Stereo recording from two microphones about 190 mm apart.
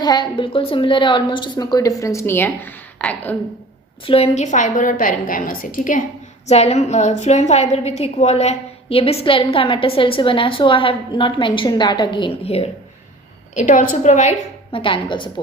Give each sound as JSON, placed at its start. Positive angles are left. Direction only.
{"t": 0.0, "sound": "a woman's voice", "side_deg": 25}
{"t": 4.0, "sound": "a woman's voice", "side_deg": 30}
{"t": 13.6, "sound": "a woman's voice", "side_deg": 45}